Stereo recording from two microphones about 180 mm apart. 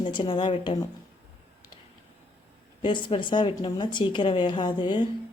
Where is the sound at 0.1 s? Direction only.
25° left (ahead or behind).